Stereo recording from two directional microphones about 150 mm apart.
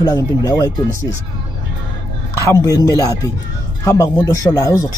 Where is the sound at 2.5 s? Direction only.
20° left (ahead or behind).